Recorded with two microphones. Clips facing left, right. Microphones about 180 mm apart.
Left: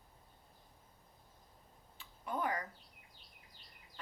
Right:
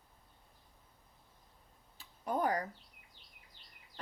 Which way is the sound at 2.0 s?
40° right (ahead or behind).